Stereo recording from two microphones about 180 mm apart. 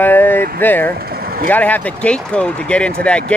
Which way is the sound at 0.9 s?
55° right (ahead or behind).